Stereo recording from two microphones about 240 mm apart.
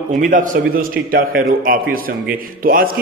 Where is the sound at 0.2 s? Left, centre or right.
Right.